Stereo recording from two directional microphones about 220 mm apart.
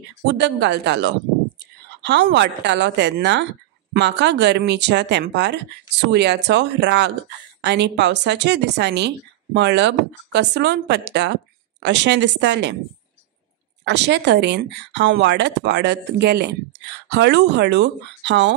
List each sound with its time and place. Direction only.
0.3 s a woman's voice: 50° right (ahead or behind)
13.8 s a woman's voice: 50° right (ahead or behind)